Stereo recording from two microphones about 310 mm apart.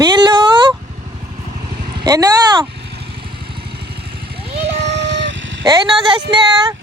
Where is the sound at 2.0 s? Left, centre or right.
Centre.